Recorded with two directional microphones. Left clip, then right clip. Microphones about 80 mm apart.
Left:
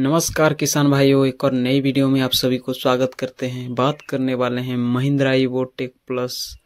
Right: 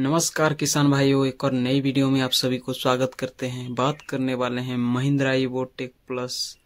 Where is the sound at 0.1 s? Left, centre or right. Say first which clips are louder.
Left 5 dB; left.